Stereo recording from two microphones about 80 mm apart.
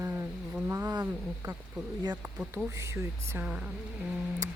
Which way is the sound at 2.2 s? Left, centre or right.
Right.